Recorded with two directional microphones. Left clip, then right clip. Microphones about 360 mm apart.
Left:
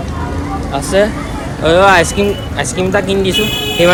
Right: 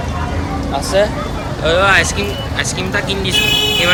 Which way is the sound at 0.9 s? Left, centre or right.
Centre.